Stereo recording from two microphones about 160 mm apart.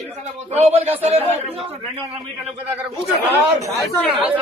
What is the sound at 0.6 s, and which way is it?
Speech, 40° right (ahead or behind).